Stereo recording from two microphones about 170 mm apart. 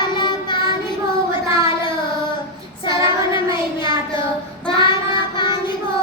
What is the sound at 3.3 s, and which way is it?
Child singing, 30° left (ahead or behind).